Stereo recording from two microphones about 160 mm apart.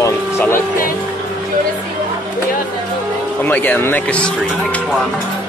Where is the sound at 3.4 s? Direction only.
10° left (ahead or behind).